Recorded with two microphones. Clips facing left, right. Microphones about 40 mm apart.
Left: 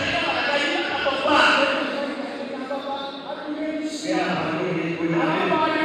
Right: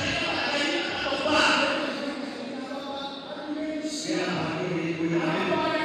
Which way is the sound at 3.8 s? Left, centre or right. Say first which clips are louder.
Left 5 dB; left.